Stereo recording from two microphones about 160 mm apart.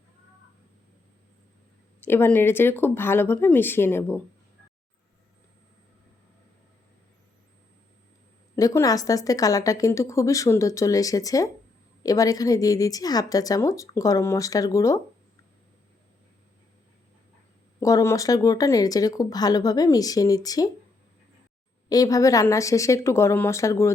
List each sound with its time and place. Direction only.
2.0 s speech: 15° left (ahead or behind)
8.5 s a woman's voice: 20° left (ahead or behind)
17.7 s a woman's voice: 20° left (ahead or behind)
21.8 s a woman's voice: 20° left (ahead or behind)